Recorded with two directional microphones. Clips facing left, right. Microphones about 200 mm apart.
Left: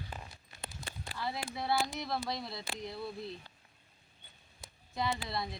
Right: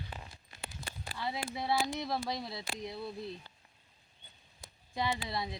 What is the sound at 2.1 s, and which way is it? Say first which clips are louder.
Speech: right 1 dB; centre (ahead or behind).